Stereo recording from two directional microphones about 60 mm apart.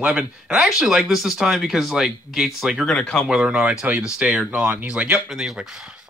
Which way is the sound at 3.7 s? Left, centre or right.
Right.